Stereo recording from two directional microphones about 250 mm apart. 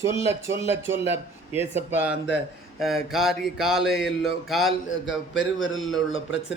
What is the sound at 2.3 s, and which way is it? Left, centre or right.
Mantra, centre.